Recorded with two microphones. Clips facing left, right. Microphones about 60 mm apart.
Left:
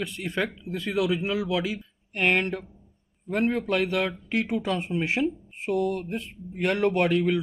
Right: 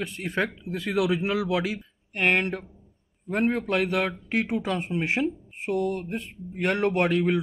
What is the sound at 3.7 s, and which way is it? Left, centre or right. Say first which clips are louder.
Speech: even; right.